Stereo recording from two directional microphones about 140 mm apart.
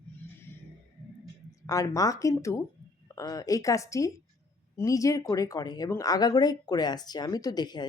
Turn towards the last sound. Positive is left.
turn(degrees=30)  # may be behind; listen again after turning